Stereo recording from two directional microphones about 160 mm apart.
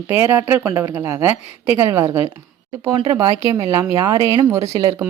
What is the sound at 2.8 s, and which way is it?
Speech, 30° right (ahead or behind).